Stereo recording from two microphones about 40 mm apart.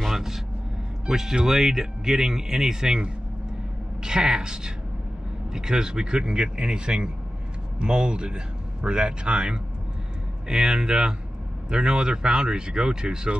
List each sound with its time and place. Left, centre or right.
0.0 s vehicle: centre
1.0 s a woman's voice: centre